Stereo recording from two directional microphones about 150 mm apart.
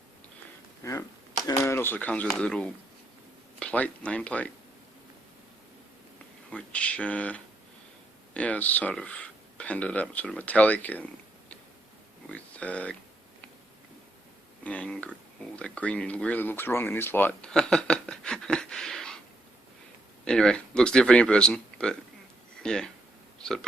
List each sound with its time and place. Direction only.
0.8 s speech: 20° left (ahead or behind)
6.5 s speech: 10° left (ahead or behind)
14.6 s speech: 10° left (ahead or behind)
20.2 s speech: 5° left (ahead or behind)